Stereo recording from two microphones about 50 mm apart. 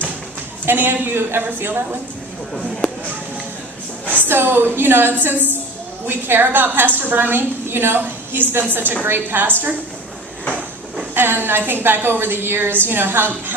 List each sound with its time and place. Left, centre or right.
0.6 s a man's voice: right
4.2 s a woman's voice: right
11.1 s a woman's voice: right